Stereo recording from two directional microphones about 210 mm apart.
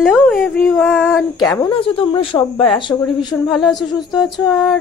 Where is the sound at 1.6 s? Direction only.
25° left (ahead or behind).